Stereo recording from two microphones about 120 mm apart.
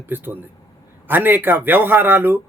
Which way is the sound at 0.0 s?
15° right (ahead or behind).